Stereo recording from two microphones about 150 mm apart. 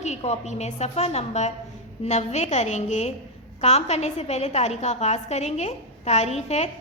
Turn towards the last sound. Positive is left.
turn(degrees=45)  # may be behind; listen again after turning